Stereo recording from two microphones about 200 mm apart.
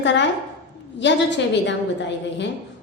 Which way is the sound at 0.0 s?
65° left (ahead or behind).